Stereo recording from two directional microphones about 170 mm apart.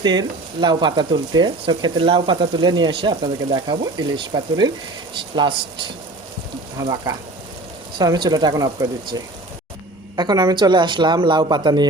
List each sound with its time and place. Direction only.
0.0 s speech: 25° right (ahead or behind)
7.9 s speech: 25° right (ahead or behind)